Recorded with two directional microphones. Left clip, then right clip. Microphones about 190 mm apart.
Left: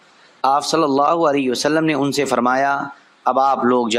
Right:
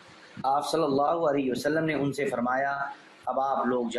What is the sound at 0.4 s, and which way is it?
A man's voice, 55° left (ahead or behind).